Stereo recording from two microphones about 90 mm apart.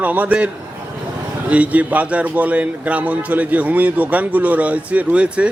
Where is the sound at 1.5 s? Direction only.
15° right (ahead or behind).